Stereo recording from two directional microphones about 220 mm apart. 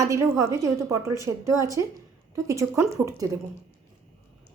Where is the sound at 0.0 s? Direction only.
15° right (ahead or behind).